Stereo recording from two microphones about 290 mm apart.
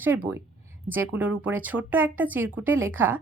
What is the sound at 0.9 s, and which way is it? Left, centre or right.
Speech, centre.